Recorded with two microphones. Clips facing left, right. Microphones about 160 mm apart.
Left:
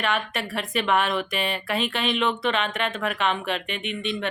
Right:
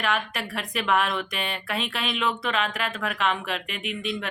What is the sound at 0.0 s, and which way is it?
Speech, centre (ahead or behind).